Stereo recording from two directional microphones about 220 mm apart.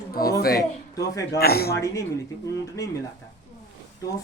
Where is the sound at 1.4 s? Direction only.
45° left (ahead or behind).